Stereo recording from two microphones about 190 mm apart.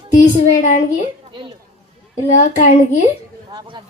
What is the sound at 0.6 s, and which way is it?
Female singing, 40° left (ahead or behind).